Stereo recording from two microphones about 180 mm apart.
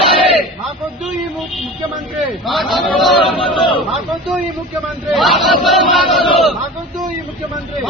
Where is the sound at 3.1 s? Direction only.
30° left (ahead or behind).